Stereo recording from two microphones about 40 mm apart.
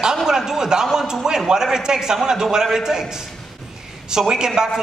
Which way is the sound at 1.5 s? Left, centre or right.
Centre.